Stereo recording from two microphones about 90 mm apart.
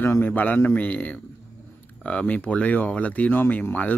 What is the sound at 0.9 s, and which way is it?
Speech, 15° left (ahead or behind).